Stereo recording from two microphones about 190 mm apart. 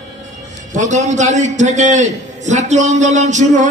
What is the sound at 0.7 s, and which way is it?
A man's voice, 40° right (ahead or behind).